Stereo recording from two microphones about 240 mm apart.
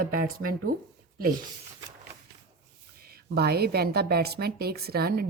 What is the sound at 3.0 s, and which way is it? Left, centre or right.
Speech, right.